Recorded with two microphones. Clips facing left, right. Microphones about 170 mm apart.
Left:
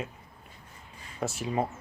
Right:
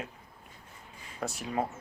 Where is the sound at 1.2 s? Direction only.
Centre (ahead or behind).